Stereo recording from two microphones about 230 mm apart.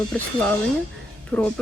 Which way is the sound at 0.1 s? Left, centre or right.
Centre.